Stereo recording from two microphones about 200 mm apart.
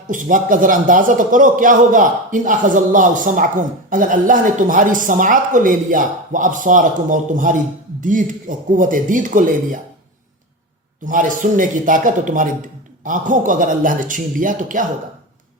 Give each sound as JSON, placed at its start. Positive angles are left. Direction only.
{"t": 0.1, "sound": "a man's voice", "side_deg": -40}
{"t": 11.0, "sound": "a man's voice", "side_deg": -40}